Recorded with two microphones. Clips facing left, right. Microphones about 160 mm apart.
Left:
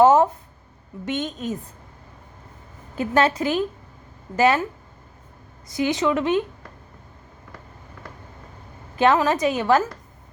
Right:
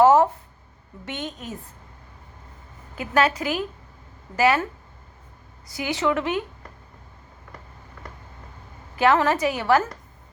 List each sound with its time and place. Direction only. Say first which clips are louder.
0.0 s a sound: left 1 dB; 20° left (ahead or behind)
1.0 s speech: left 6 dB; 20° left (ahead or behind)
3.0 s speech: left 2 dB; 25° left (ahead or behind)
5.6 s speech: left 3 dB; 20° left (ahead or behind)
9.1 s speech: left 1 dB; 20° left (ahead or behind)